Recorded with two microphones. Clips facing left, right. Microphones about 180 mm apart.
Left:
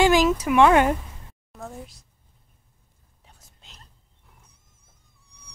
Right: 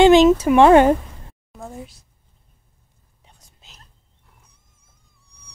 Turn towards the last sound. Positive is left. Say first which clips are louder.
# right 1 dB
turn(degrees=0)  # may be behind; listen again after turning